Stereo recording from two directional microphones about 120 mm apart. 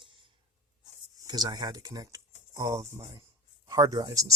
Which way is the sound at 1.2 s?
35° right (ahead or behind).